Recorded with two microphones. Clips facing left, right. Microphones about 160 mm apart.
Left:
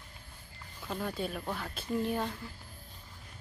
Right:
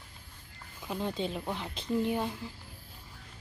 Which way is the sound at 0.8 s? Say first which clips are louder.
Right 2 dB; 20° right (ahead or behind).